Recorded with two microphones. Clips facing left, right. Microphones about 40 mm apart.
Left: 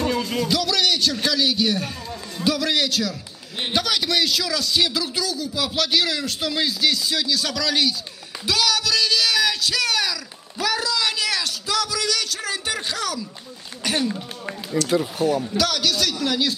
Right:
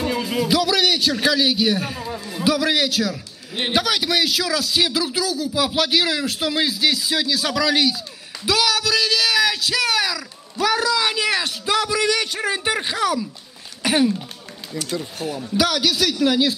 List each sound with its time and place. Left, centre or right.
0.0 s speech: centre
3.5 s a man's voice: right
3.8 s a man's voice: centre
14.9 s speech: centre
15.5 s speech: centre